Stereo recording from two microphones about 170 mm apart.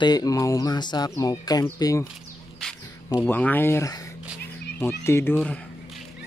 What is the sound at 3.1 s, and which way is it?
Speech, 10° left (ahead or behind).